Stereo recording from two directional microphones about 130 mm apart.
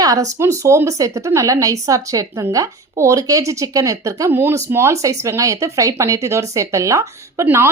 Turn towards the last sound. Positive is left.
turn(degrees=-20)  # may be behind; listen again after turning